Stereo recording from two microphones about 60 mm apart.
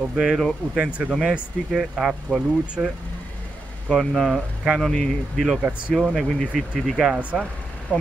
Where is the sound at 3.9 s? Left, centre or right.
Centre.